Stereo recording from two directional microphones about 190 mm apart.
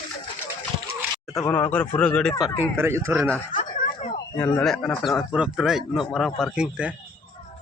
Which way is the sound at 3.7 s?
45° left (ahead or behind).